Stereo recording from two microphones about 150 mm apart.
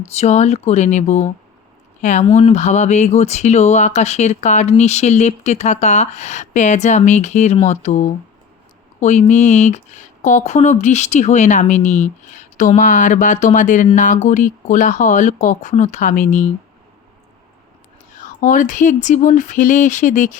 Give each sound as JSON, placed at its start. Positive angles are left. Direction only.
{"t": 0.0, "sound": "speech", "side_deg": 45}
{"t": 18.2, "sound": "speech", "side_deg": 60}